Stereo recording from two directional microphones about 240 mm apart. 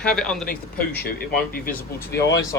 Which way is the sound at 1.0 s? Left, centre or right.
Left.